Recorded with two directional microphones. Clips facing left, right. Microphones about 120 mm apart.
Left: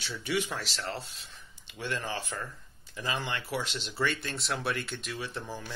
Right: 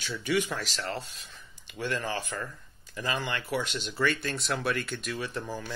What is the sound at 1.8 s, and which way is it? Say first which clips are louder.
Speech: right 3 dB; 20° left (ahead or behind).